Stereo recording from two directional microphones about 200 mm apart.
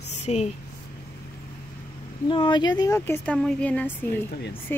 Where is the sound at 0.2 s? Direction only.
35° left (ahead or behind).